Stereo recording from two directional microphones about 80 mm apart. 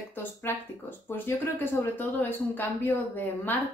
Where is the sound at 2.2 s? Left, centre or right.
Left.